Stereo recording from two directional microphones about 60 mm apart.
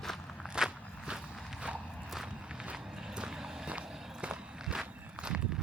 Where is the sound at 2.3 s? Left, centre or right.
Centre.